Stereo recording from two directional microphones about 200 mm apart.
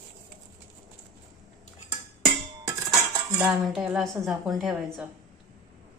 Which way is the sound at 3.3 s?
10° right (ahead or behind).